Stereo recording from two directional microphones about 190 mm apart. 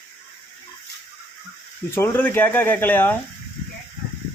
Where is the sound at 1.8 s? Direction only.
10° left (ahead or behind).